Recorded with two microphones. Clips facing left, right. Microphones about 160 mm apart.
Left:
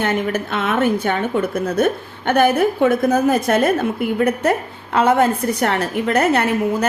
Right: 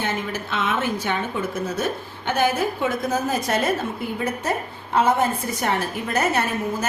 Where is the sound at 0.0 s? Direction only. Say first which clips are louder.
Left 7 dB; 60° left (ahead or behind).